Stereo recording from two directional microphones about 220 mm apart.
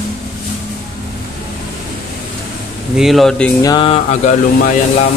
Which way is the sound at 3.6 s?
20° left (ahead or behind).